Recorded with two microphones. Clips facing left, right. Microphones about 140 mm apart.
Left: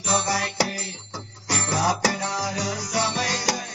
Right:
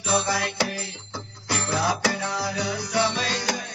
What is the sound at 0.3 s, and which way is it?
Music, 40° left (ahead or behind).